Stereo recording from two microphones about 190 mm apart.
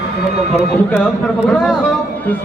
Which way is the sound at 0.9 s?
10° left (ahead or behind).